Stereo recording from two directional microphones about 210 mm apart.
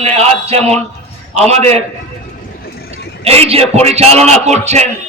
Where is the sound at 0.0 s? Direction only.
30° right (ahead or behind).